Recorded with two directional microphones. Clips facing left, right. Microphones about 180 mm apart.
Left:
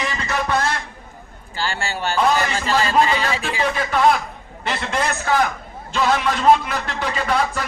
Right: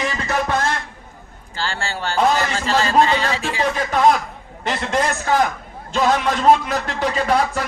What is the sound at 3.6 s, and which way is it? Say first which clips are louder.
A man's voice: right 1 dB; 40° right (ahead or behind).